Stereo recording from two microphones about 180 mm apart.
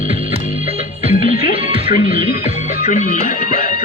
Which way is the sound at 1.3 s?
55° left (ahead or behind).